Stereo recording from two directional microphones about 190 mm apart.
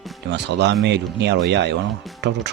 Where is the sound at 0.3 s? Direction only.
65° right (ahead or behind).